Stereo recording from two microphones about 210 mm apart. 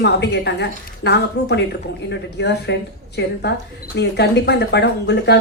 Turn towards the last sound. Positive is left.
turn(degrees=50)  # may be behind; listen again after turning